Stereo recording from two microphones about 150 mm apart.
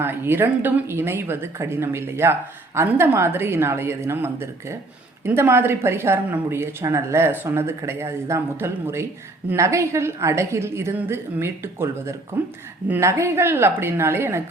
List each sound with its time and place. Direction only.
0.0 s a woman's voice: 15° right (ahead or behind)